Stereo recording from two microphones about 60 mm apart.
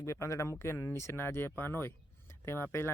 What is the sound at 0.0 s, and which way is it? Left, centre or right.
Speech, left.